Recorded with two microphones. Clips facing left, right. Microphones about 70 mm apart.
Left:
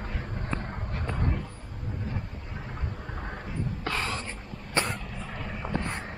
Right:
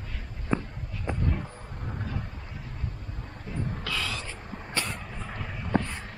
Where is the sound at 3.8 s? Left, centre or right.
Left.